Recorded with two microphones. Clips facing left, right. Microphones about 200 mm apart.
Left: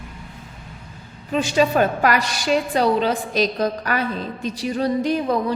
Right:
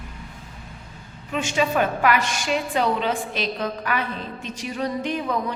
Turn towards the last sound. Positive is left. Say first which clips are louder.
# left 5 dB
turn(degrees=35)  # may be behind; listen again after turning